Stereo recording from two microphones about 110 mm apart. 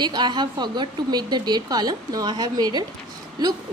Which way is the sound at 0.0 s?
40° right (ahead or behind).